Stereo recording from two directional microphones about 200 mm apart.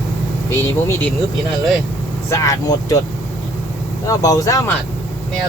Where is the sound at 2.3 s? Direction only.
15° left (ahead or behind).